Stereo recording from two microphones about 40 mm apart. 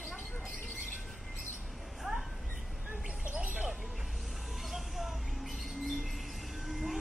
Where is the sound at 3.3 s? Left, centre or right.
Right.